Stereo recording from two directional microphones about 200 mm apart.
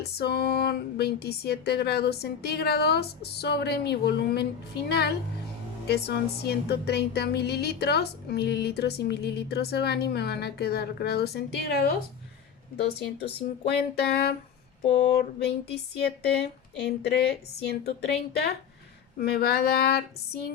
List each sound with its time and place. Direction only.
0.0 s speech: 55° left (ahead or behind)
19.2 s speech: 55° left (ahead or behind)